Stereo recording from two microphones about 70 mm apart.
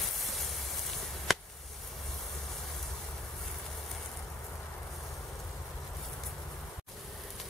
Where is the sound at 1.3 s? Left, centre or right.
Centre.